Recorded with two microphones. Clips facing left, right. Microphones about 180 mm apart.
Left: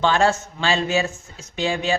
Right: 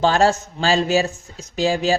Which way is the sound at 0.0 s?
40° right (ahead or behind).